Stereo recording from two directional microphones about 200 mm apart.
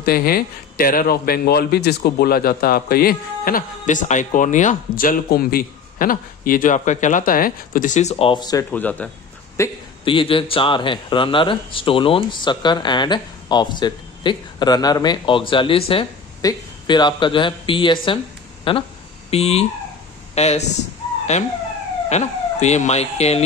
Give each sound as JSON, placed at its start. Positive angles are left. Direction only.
{"t": 0.0, "sound": "a man's voice", "side_deg": 50}
{"t": 8.7, "sound": "speech", "side_deg": 10}
{"t": 10.0, "sound": "a man's voice", "side_deg": 25}